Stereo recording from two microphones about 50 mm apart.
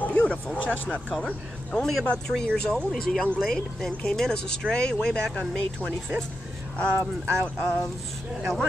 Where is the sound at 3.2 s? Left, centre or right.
Centre.